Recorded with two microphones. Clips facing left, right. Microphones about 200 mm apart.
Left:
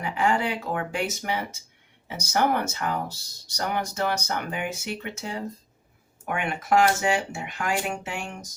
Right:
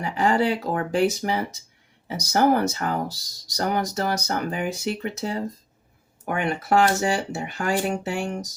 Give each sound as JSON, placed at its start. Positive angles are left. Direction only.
{"t": 0.0, "sound": "speech", "side_deg": -35}